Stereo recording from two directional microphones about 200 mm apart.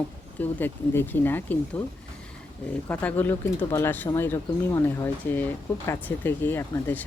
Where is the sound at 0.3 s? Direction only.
10° left (ahead or behind).